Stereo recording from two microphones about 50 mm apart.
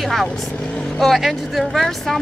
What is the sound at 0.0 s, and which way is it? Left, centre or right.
Speech, centre.